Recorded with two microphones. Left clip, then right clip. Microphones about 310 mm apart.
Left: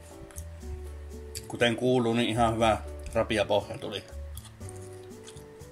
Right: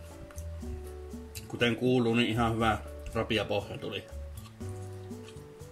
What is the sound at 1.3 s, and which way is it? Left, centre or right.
Music, centre.